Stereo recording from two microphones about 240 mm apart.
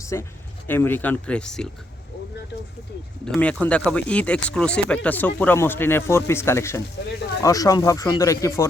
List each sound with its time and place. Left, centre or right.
0.0 s speech: centre
3.2 s speech: centre